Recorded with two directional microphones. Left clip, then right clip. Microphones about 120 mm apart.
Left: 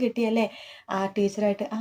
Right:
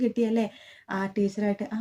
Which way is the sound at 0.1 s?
20° left (ahead or behind).